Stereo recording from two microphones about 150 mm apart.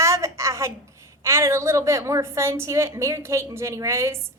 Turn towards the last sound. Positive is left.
turn(degrees=-20)  # may be behind; listen again after turning